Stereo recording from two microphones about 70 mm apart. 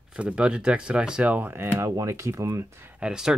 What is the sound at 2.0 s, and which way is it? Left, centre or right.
Speech, right.